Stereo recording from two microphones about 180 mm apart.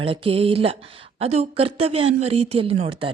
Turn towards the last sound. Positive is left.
turn(degrees=-30)  # may be behind; listen again after turning